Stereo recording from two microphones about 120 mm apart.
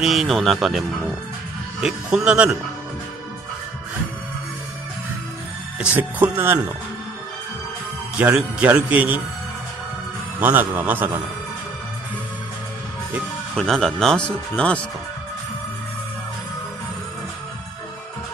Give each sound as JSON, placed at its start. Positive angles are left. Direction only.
{"t": 0.0, "sound": "speech", "side_deg": 0}
{"t": 5.8, "sound": "speech", "side_deg": -15}
{"t": 8.4, "sound": "speech", "side_deg": -10}
{"t": 10.4, "sound": "speech", "side_deg": -15}
{"t": 13.6, "sound": "speech", "side_deg": 5}